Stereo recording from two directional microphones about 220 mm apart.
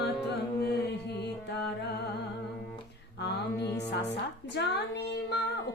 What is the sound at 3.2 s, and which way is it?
Music, 50° left (ahead or behind).